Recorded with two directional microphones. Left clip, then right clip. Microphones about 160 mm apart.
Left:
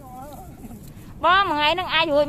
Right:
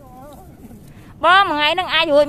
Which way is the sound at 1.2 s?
40° right (ahead or behind).